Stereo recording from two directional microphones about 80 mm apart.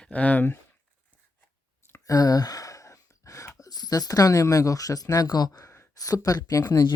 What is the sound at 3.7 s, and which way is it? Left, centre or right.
Speech, left.